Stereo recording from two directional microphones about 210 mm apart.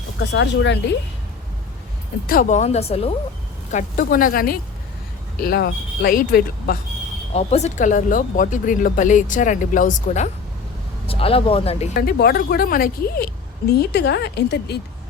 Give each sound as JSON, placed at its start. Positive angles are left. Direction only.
{"t": 0.2, "sound": "speech", "side_deg": 55}
{"t": 2.2, "sound": "a woman's voice", "side_deg": 40}
{"t": 7.3, "sound": "speech", "side_deg": 30}
{"t": 11.0, "sound": "speech", "side_deg": 25}
{"t": 11.9, "sound": "a woman's voice", "side_deg": 45}